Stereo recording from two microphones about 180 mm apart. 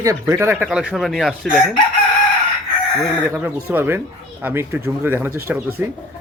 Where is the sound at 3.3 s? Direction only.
10° right (ahead or behind).